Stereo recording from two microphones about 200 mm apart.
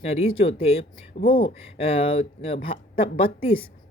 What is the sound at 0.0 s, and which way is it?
Speech, 30° left (ahead or behind).